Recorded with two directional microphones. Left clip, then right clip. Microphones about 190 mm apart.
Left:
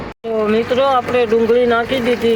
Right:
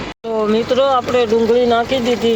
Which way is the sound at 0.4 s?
5° right (ahead or behind).